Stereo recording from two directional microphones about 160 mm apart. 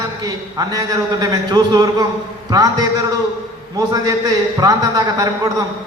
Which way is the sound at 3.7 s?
25° right (ahead or behind).